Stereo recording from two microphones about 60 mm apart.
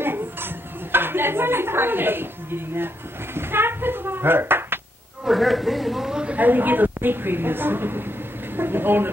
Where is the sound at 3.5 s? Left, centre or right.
Right.